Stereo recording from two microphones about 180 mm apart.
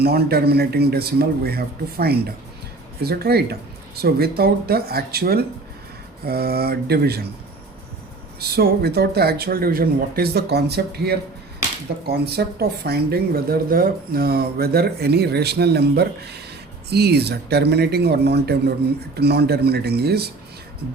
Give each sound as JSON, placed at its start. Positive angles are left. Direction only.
{"t": 0.0, "sound": "speech", "side_deg": -60}
{"t": 8.4, "sound": "speech", "side_deg": -60}